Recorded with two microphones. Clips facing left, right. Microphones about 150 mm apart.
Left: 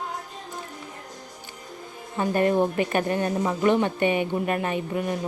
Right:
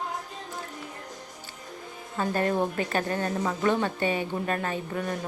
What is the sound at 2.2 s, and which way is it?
Speech, 15° left (ahead or behind).